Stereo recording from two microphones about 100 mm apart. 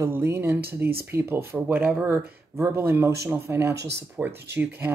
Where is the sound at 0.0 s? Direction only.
25° right (ahead or behind).